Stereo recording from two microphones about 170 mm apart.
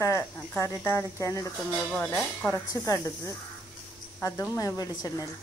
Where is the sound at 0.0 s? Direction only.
15° left (ahead or behind).